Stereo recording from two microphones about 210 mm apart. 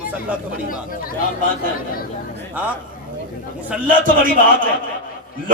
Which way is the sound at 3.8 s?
40° right (ahead or behind).